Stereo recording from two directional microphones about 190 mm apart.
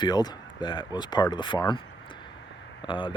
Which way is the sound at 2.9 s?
25° left (ahead or behind).